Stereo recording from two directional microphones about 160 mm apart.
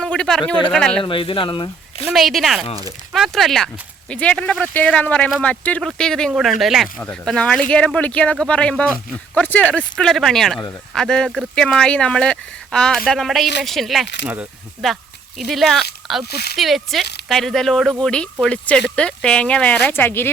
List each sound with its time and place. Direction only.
0.0 s speech: 5° left (ahead or behind)
1.0 s speech: 35° left (ahead or behind)
2.1 s speech: centre (ahead or behind)
16.3 s speech: 90° left
16.6 s speech: centre (ahead or behind)